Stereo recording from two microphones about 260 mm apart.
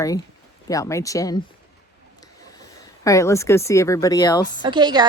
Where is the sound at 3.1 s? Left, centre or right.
Centre.